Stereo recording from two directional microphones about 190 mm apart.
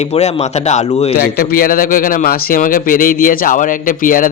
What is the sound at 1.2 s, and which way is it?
A man's voice, 50° left (ahead or behind).